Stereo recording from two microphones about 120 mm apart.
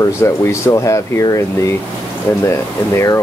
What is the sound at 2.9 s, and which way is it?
Speech, 25° left (ahead or behind).